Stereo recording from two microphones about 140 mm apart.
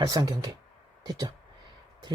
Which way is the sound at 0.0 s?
25° right (ahead or behind).